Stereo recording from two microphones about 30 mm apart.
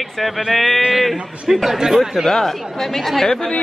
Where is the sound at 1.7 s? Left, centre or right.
Centre.